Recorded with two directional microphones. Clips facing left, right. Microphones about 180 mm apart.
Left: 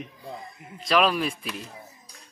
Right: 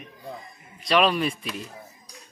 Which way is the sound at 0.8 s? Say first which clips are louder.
Right 1 dB; centre (ahead or behind).